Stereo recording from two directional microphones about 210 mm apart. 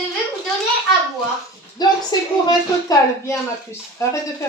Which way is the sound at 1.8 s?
20° left (ahead or behind).